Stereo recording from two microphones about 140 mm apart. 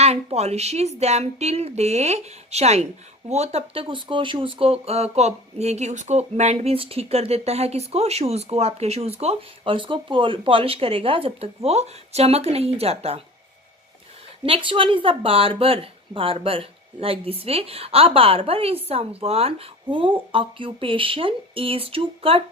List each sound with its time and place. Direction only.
0.0 s speech: 50° right (ahead or behind)
14.4 s speech: 40° right (ahead or behind)